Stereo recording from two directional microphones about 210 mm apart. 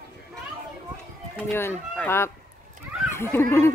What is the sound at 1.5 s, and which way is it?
Speech, 10° left (ahead or behind).